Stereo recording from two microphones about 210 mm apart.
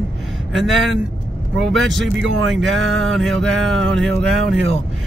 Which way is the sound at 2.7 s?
65° right (ahead or behind).